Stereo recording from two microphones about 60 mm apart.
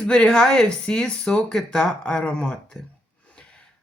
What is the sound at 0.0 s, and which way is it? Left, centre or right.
Speech, centre.